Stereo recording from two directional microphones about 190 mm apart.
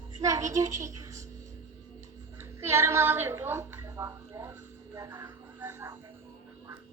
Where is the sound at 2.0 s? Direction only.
15° right (ahead or behind).